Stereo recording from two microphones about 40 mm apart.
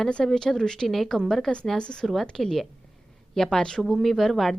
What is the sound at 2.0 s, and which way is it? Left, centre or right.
Speech, centre.